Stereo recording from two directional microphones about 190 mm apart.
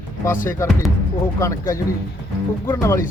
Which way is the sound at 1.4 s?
15° left (ahead or behind).